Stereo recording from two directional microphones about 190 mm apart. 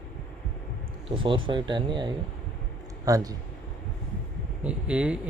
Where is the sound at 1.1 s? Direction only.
25° right (ahead or behind).